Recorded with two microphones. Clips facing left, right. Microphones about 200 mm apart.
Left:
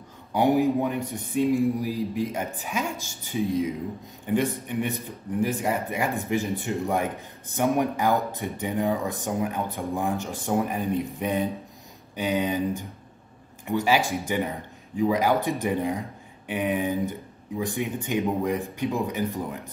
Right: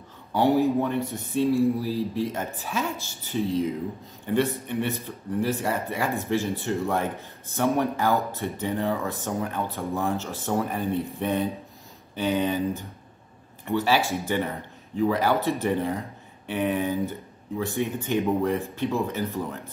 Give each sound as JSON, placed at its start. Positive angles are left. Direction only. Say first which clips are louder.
{"t": 0.3, "sound": "speech", "louder": "even", "side_deg": 15}